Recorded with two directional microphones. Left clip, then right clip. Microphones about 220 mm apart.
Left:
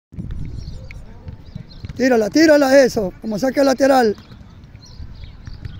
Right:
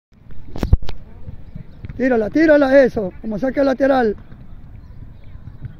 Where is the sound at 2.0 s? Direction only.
5° left (ahead or behind).